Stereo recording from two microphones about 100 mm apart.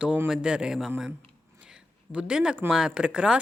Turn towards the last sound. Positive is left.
turn(degrees=-10)  # may be behind; listen again after turning